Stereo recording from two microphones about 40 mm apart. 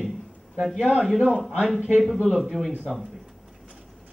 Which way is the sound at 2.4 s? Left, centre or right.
Centre.